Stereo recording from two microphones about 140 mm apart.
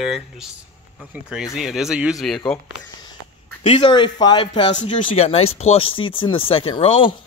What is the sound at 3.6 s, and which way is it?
Speech, 40° left (ahead or behind).